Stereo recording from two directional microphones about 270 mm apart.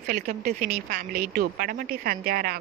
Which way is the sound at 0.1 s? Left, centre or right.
Right.